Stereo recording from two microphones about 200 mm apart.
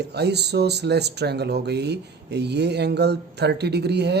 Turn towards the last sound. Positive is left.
turn(degrees=-55)  # may be behind; listen again after turning